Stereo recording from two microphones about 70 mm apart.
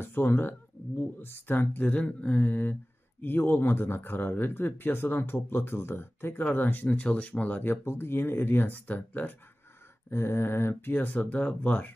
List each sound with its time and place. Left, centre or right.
0.0 s speech: left
7.7 s speech: left
10.0 s speech: left